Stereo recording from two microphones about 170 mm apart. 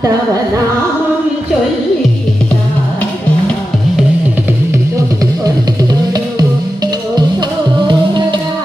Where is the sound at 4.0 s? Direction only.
10° right (ahead or behind).